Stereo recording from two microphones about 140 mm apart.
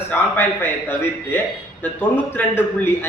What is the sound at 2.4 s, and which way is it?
Speech, 10° left (ahead or behind).